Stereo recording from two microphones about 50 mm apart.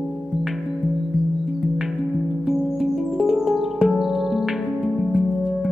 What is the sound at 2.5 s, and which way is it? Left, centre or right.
Music, centre.